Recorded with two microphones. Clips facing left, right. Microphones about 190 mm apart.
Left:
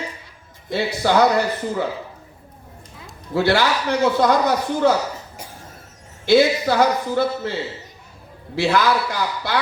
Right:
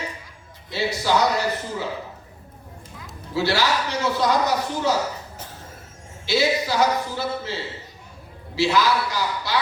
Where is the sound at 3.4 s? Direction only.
55° left (ahead or behind).